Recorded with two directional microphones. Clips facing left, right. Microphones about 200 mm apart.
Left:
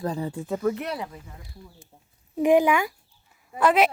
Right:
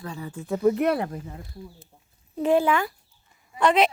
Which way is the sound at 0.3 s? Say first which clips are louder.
Even; centre (ahead or behind).